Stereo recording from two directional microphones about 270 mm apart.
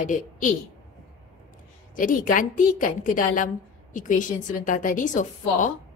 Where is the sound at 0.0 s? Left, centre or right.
Left.